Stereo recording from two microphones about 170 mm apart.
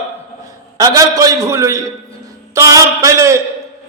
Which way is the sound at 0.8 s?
20° right (ahead or behind).